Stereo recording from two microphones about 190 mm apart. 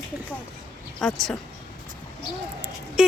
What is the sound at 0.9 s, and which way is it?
Speech, 5° left (ahead or behind).